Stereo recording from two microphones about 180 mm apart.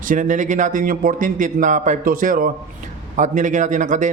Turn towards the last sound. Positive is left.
turn(degrees=-45)  # may be behind; listen again after turning